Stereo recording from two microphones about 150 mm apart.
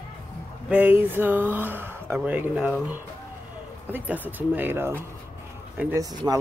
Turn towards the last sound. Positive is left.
turn(degrees=-25)  # may be behind; listen again after turning